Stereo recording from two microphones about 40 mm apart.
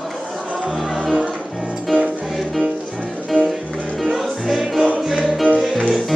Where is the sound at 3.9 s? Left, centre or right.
Centre.